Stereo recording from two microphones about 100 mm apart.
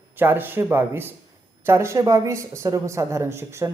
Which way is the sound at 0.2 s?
20° right (ahead or behind).